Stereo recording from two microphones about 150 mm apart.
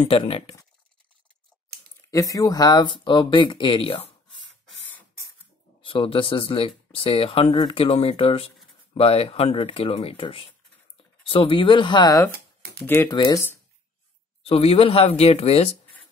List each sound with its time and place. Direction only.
0.0 s speech: 40° left (ahead or behind)
2.0 s speech: 25° left (ahead or behind)
5.8 s speech: 35° left (ahead or behind)
12.3 s a sound: 90° right
12.8 s speech: 15° left (ahead or behind)
13.1 s speech: 30° left (ahead or behind)
14.4 s speech: 40° left (ahead or behind)